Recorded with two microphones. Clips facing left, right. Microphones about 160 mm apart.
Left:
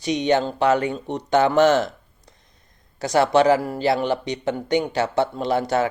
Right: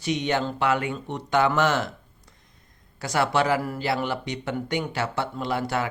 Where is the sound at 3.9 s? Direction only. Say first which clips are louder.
Left 7 dB; 20° left (ahead or behind).